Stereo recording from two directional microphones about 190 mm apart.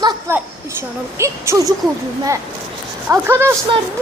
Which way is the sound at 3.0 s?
10° right (ahead or behind).